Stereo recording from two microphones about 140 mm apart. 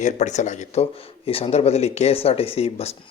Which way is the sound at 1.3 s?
45° left (ahead or behind).